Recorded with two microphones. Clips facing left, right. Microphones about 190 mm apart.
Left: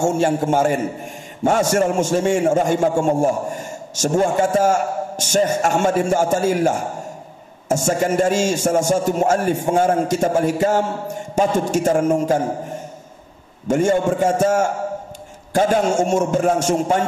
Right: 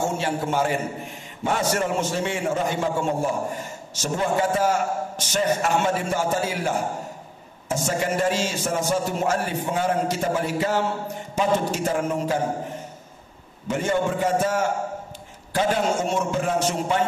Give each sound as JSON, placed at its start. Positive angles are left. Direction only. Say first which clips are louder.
{"t": 0.0, "sound": "a man's voice", "louder": "left 7 dB", "side_deg": 45}
{"t": 13.7, "sound": "a man's voice", "louder": "left 7 dB", "side_deg": 45}